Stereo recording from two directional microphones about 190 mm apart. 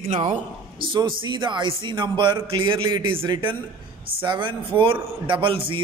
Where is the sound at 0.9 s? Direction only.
25° right (ahead or behind).